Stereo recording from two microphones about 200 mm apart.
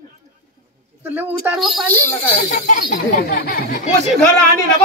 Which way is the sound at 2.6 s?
40° left (ahead or behind).